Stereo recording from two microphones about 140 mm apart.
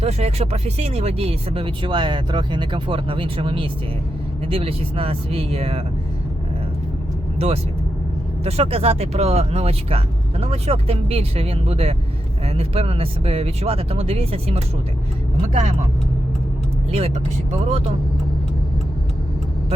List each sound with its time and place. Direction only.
0.0 s speech: 50° right (ahead or behind)
7.3 s speech: 45° right (ahead or behind)
16.9 s speech: 50° right (ahead or behind)